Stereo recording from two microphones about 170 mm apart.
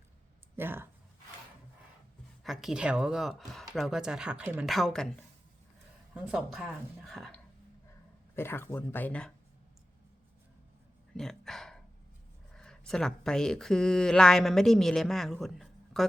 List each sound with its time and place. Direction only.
0.5 s speech: 15° right (ahead or behind)
2.4 s speech: centre (ahead or behind)
6.1 s speech: 5° right (ahead or behind)
8.4 s speech: 15° left (ahead or behind)
11.1 s a sound: centre (ahead or behind)
12.5 s speech: 5° left (ahead or behind)